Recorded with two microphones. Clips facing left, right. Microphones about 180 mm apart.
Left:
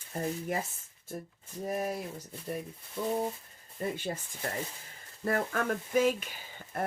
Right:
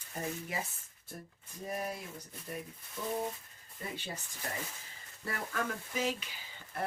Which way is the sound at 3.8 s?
45° left (ahead or behind).